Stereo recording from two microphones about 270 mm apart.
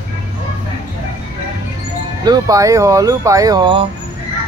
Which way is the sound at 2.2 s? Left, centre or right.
Centre.